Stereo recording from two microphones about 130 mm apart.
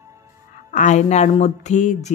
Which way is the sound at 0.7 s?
70° left (ahead or behind).